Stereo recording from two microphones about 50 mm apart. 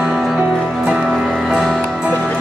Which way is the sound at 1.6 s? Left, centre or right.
Centre.